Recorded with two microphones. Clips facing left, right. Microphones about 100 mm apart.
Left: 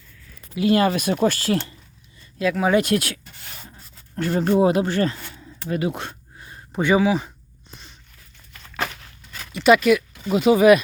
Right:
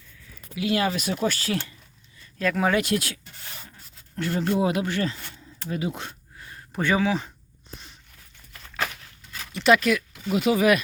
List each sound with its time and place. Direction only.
0.5 s speech: 40° left (ahead or behind)
2.4 s speech: 5° left (ahead or behind)
2.8 s speech: 65° left (ahead or behind)
3.8 s a sound: 40° left (ahead or behind)
4.4 s speech: 50° left (ahead or behind)
4.6 s speech: 35° left (ahead or behind)
5.0 s speech: 65° left (ahead or behind)
6.3 s a sound: 20° left (ahead or behind)
9.5 s speech: 5° left (ahead or behind)
10.2 s speech: 25° left (ahead or behind)